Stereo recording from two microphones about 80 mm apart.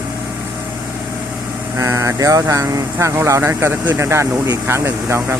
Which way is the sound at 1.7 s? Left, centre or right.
Right.